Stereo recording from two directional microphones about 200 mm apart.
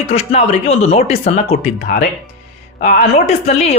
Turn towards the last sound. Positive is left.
turn(degrees=35)  # may be behind; listen again after turning